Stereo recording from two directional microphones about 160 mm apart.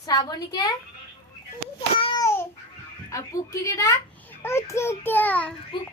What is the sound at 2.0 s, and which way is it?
Babbling, 30° left (ahead or behind).